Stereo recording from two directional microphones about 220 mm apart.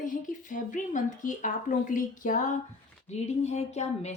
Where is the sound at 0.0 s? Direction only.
35° left (ahead or behind).